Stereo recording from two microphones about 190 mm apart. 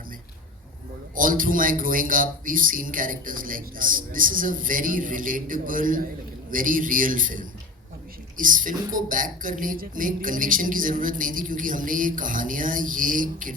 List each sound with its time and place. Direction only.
1.1 s speech: 45° right (ahead or behind)